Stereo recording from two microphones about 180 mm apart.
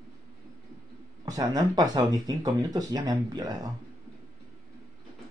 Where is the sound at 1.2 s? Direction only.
20° right (ahead or behind).